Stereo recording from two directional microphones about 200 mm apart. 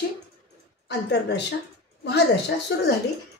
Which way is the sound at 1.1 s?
60° left (ahead or behind).